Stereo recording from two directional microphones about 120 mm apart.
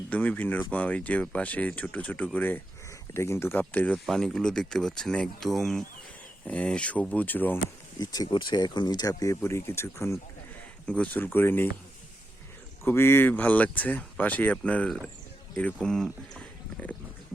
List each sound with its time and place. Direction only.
0.1 s speech: 10° left (ahead or behind)
3.9 s speech: 5° left (ahead or behind)
7.9 s speech: 35° left (ahead or behind)
10.8 s speech: 10° left (ahead or behind)
12.8 s speech: 20° left (ahead or behind)
16.3 s a sound: 10° left (ahead or behind)